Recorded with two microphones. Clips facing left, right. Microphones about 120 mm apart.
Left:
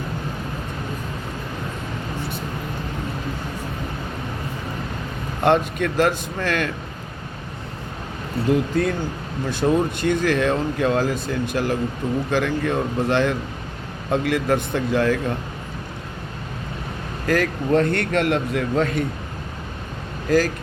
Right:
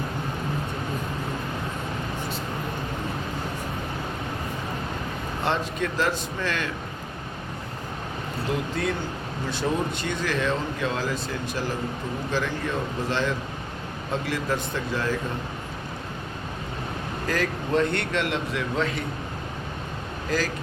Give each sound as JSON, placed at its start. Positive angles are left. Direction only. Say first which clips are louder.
{"t": 5.4, "sound": "speech", "louder": "left 8 dB", "side_deg": 55}
{"t": 8.7, "sound": "speech", "louder": "left 6 dB", "side_deg": 50}
{"t": 17.2, "sound": "speech", "louder": "left 7 dB", "side_deg": 55}
{"t": 20.3, "sound": "speech", "louder": "left 8 dB", "side_deg": 50}